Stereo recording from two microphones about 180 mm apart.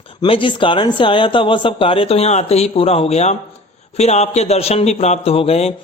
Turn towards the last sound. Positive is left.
turn(degrees=35)  # may be behind; listen again after turning